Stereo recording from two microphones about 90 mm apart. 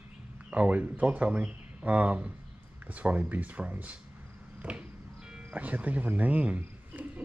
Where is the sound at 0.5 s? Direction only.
15° right (ahead or behind).